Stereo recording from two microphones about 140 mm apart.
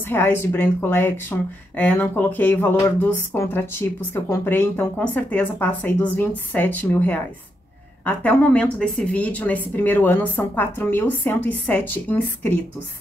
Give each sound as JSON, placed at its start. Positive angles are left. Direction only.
{"t": 0.1, "sound": "speech", "side_deg": 15}